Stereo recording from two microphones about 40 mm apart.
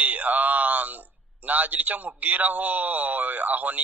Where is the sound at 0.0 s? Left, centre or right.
Right.